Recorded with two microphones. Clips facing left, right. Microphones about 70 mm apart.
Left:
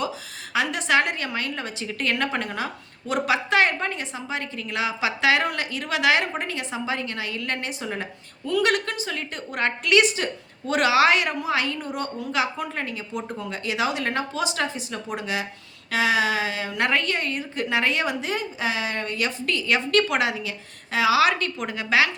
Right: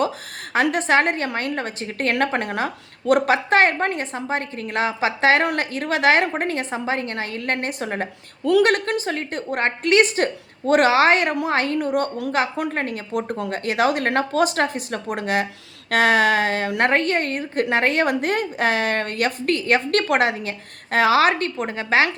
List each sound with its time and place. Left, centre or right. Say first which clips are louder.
0.5 s a woman's voice: right 4 dB; right